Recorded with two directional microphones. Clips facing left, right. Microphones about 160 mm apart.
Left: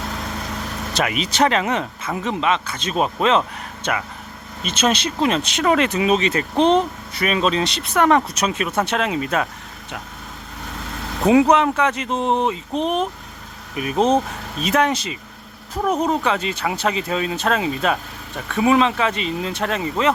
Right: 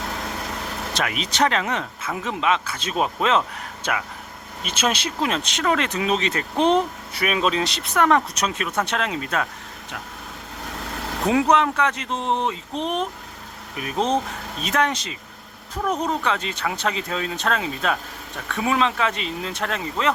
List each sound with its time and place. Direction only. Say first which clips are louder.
0.9 s speech: left 4 dB; 5° left (ahead or behind)
7.1 s speech: left 3 dB; 10° right (ahead or behind); by 9.5 s 10° left (ahead or behind)
11.5 s speech: left 3 dB; 5° left (ahead or behind)
12.1 s speech: left 4 dB; 40° left (ahead or behind)
12.4 s speech: left 4 dB; 5° left (ahead or behind)